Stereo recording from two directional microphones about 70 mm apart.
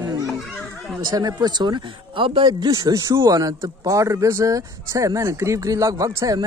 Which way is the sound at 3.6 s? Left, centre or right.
Right.